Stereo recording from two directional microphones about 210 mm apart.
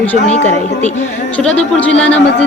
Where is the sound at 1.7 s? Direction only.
5° left (ahead or behind).